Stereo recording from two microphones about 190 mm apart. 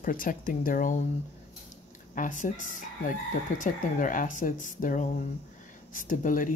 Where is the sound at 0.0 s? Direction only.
45° left (ahead or behind).